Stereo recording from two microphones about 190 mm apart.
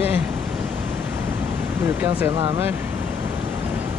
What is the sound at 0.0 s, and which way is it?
Pink noise, 10° right (ahead or behind).